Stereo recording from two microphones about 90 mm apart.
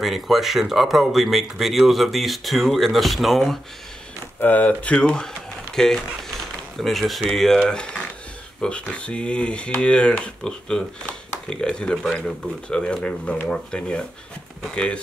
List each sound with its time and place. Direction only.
0.0 s speech: centre (ahead or behind)
4.4 s speech: 20° left (ahead or behind)